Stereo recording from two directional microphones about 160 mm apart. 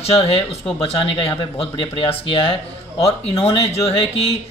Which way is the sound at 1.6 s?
35° left (ahead or behind).